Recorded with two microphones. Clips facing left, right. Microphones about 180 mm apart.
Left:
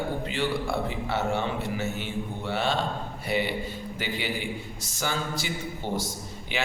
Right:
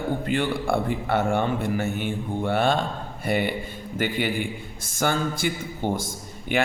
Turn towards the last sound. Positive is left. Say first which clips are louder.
# right 6 dB
turn(degrees=-50)  # may be behind; listen again after turning